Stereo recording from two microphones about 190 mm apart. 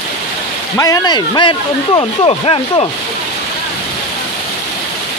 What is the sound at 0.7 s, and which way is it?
Speech, 20° left (ahead or behind).